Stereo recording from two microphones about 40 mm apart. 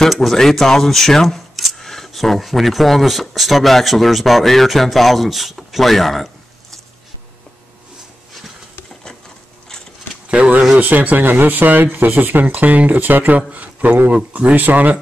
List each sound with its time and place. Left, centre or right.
0.1 s speech: centre
10.4 s speech: right
10.8 s speech: right
11.2 s speech: right
13.5 s speech: right